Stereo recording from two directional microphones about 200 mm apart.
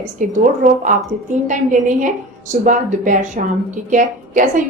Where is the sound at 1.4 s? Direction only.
40° right (ahead or behind).